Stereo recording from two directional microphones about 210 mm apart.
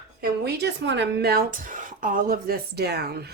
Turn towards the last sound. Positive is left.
turn(degrees=-50)  # may be behind; listen again after turning